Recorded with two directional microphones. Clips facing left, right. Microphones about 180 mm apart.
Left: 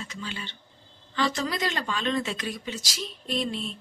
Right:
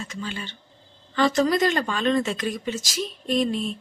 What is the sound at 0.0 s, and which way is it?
Speech, 45° right (ahead or behind).